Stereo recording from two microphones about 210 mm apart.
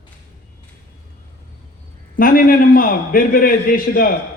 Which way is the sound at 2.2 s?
40° left (ahead or behind).